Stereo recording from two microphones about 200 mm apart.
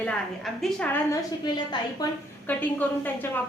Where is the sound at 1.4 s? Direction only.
20° left (ahead or behind).